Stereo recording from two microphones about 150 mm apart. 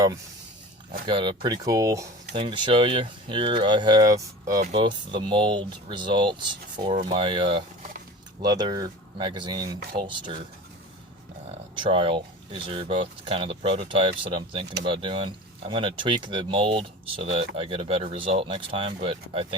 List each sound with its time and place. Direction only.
1.0 s speech: 30° right (ahead or behind)
2.3 s speech: 30° right (ahead or behind)
11.7 s speech: 35° right (ahead or behind)